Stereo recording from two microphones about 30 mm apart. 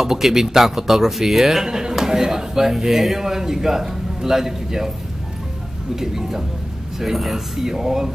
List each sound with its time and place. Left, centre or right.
0.0 s a man's voice: centre
1.6 s a man's voice: right
5.9 s a man's voice: centre